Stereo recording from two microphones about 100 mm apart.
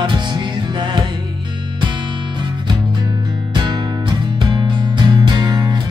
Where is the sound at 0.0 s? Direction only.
50° right (ahead or behind).